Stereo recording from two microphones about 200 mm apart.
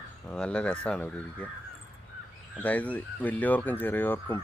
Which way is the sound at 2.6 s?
5° left (ahead or behind).